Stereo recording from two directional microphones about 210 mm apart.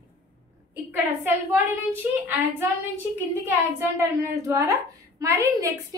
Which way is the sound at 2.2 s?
10° right (ahead or behind).